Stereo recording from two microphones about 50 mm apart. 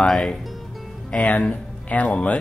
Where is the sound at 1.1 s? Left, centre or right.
Left.